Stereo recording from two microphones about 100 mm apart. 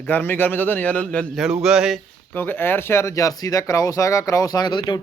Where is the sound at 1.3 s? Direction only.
5° right (ahead or behind).